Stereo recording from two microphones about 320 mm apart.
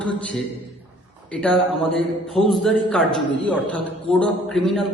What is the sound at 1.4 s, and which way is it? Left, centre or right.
A man's voice, centre.